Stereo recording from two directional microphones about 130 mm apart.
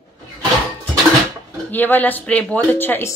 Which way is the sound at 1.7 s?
15° left (ahead or behind).